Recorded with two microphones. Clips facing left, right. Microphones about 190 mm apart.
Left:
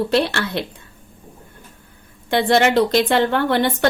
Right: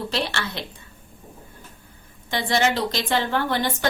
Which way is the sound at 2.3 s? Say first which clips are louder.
Left 7 dB; 60° left (ahead or behind).